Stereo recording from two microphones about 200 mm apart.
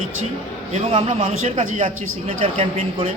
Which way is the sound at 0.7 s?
30° right (ahead or behind).